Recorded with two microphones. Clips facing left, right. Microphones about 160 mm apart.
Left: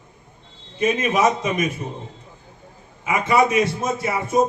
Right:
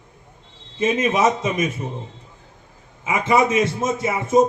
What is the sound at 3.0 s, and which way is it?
A man's voice, 25° right (ahead or behind).